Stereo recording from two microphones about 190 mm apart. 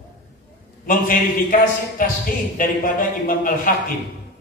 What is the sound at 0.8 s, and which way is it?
A man's voice, 45° left (ahead or behind).